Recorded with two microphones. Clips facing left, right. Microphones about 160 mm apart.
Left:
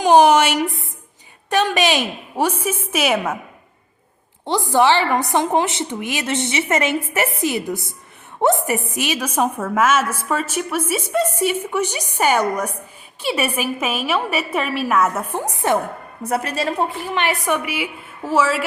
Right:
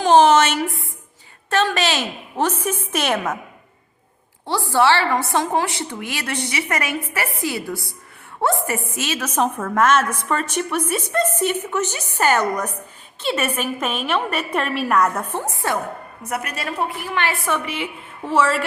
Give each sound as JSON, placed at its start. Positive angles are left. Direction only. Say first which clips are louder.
{"t": 0.0, "sound": "a woman's voice", "louder": "left 1 dB", "side_deg": 15}
{"t": 4.4, "sound": "a woman's voice", "louder": "left 2 dB", "side_deg": 20}
{"t": 16.2, "sound": "a woman's voice", "louder": "left 6 dB", "side_deg": 30}
{"t": 17.4, "sound": "a woman's voice", "louder": "left 2 dB", "side_deg": 10}